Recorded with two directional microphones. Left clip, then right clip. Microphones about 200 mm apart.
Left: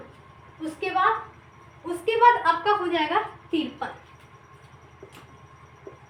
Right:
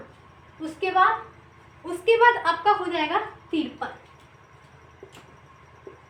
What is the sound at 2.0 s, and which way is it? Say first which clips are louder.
Speech: even; 30° right (ahead or behind).